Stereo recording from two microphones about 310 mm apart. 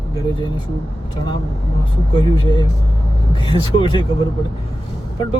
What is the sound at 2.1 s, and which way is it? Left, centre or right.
Speech, centre.